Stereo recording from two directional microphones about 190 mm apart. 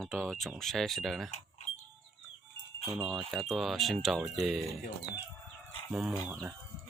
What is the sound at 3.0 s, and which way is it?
Speech, centre (ahead or behind).